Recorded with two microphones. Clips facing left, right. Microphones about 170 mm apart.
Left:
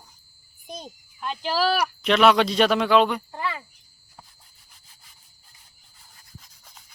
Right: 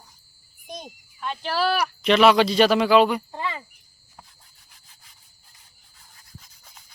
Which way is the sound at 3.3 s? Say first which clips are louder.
Even; 20° right (ahead or behind).